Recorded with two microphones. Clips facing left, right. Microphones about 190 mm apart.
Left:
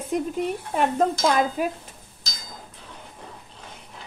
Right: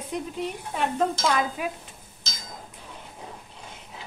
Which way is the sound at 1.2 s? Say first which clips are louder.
Left 4 dB; 40° left (ahead or behind).